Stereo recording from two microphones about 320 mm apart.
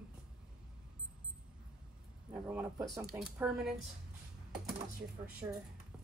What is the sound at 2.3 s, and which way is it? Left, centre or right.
Speech, centre.